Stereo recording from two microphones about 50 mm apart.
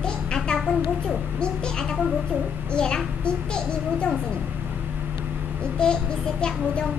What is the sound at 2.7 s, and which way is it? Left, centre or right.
A woman's voice, centre.